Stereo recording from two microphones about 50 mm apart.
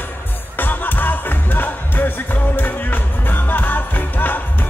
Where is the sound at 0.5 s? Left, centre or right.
Left.